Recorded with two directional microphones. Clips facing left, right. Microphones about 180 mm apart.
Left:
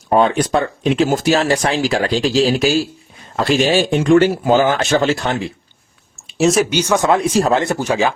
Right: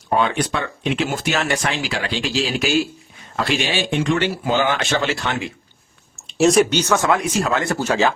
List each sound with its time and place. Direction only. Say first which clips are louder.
0.2 s speech: left 8 dB; 40° left (ahead or behind)
6.2 s speech: even; centre (ahead or behind)
7.1 s speech: left 5 dB; 30° left (ahead or behind)
7.6 s speech: left 2 dB; 20° left (ahead or behind)